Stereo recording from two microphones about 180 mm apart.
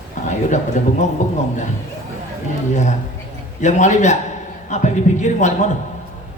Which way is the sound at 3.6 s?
40° left (ahead or behind).